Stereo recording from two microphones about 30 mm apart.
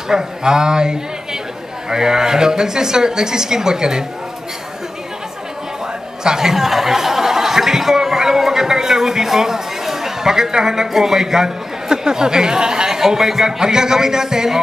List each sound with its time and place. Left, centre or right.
0.1 s a man's voice: right
6.2 s chuckle: centre
10.9 s a man's voice: centre